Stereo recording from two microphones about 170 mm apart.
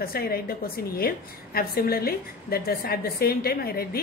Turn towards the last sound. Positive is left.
turn(degrees=65)  # may be behind; listen again after turning